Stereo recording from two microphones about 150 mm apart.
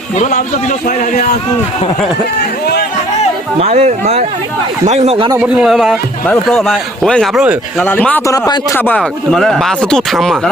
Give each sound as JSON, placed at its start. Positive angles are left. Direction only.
{"t": 0.2, "sound": "a man's voice", "side_deg": 50}
{"t": 3.6, "sound": "speech", "side_deg": -45}
{"t": 5.4, "sound": "speech", "side_deg": 0}
{"t": 6.2, "sound": "speech", "side_deg": 10}
{"t": 8.3, "sound": "speech", "side_deg": 25}
{"t": 8.8, "sound": "speech", "side_deg": 5}